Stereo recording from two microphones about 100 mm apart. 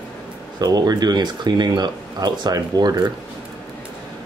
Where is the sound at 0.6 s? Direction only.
40° right (ahead or behind).